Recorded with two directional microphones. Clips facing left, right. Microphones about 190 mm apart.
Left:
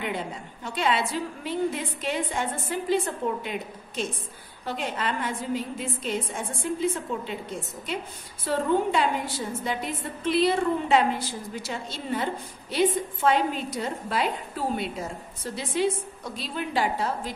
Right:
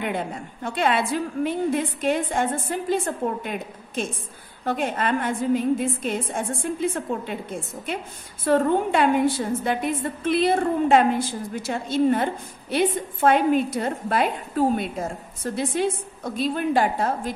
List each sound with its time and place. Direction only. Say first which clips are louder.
0.0 s a woman's voice: right 4 dB; 55° right (ahead or behind)
8.5 s a woman's voice: right 4 dB; 55° right (ahead or behind)